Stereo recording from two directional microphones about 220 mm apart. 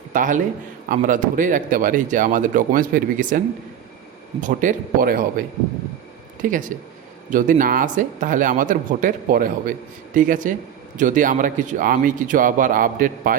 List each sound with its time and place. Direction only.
0.1 s a man's voice: 35° right (ahead or behind)
6.5 s speech: 35° right (ahead or behind)